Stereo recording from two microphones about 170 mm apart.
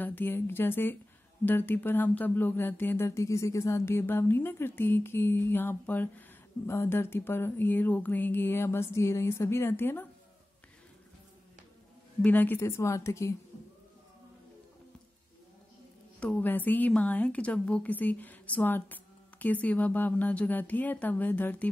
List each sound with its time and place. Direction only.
0.0 s speech: 10° left (ahead or behind)
12.2 s speech: 10° left (ahead or behind)
16.2 s speech: 10° left (ahead or behind)